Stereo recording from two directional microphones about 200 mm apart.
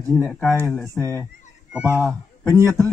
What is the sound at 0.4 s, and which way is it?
A man's voice, 10° right (ahead or behind).